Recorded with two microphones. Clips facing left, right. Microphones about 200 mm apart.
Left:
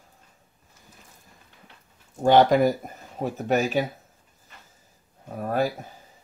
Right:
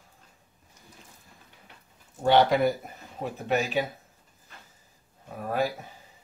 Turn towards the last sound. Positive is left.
turn(degrees=40)  # may be behind; listen again after turning